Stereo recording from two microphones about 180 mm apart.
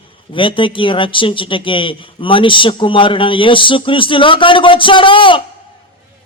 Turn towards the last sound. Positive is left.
turn(degrees=30)  # may be behind; listen again after turning